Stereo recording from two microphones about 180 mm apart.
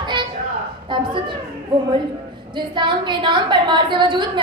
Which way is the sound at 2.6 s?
25° right (ahead or behind).